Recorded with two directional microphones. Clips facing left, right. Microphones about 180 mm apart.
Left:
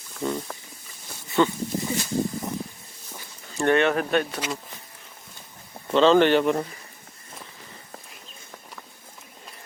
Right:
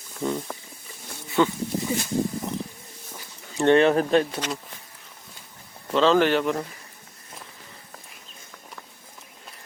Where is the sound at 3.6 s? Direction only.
30° right (ahead or behind).